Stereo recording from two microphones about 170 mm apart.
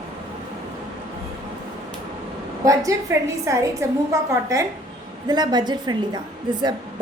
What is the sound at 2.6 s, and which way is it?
A woman's voice, 20° right (ahead or behind).